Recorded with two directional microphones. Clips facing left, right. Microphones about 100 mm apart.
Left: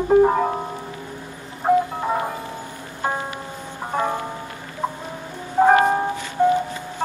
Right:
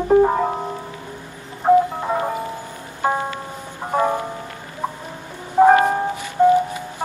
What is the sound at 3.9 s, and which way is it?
Music, 15° right (ahead or behind).